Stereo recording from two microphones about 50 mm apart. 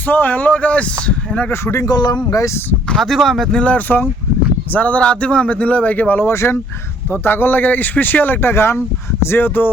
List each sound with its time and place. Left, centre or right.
0.1 s speech: left
1.6 s speech: left
3.0 s speech: centre
3.5 s speech: left
4.7 s speech: left
6.2 s speech: left
7.1 s speech: left
9.2 s speech: left